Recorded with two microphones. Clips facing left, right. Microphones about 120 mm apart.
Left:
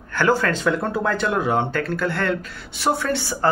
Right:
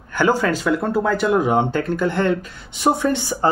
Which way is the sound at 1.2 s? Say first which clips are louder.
Right 5 dB; 15° right (ahead or behind).